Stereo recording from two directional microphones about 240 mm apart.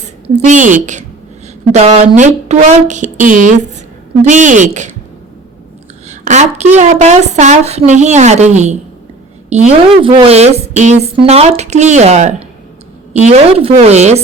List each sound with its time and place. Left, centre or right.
0.0 s a woman's voice: right
6.1 s a woman's voice: right